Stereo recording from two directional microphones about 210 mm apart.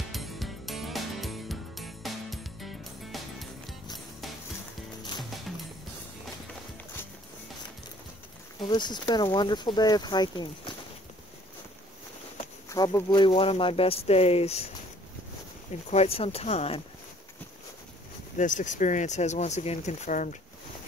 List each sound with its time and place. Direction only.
0.1 s music: centre (ahead or behind)
8.5 s speech: 20° left (ahead or behind)
12.6 s speech: 15° left (ahead or behind)
15.9 s speech: 30° left (ahead or behind)
18.4 s speech: 35° left (ahead or behind)